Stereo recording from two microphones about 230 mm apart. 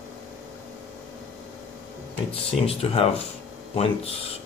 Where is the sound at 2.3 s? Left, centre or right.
Left.